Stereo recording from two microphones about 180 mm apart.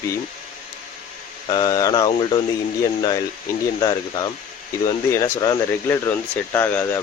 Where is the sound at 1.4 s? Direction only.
25° left (ahead or behind).